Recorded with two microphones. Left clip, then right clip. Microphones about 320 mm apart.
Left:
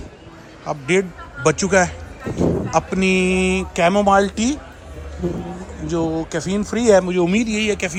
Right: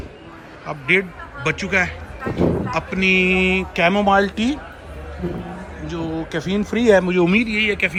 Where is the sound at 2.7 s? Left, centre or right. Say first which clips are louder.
Even; centre.